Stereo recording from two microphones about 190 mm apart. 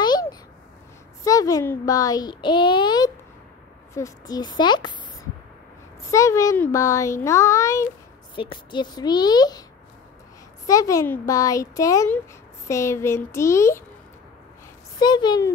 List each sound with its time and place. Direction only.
0.0 s babbling: 20° left (ahead or behind)
1.2 s a child's voice: 15° left (ahead or behind)
6.0 s a child's voice: 15° left (ahead or behind)
10.7 s a child's voice: 20° left (ahead or behind)
15.0 s a child's voice: 20° left (ahead or behind)